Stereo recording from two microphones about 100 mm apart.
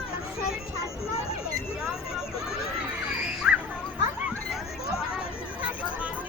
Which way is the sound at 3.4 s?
10° right (ahead or behind).